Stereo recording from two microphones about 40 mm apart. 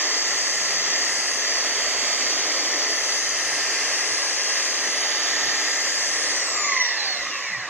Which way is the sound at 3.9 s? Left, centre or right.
Right.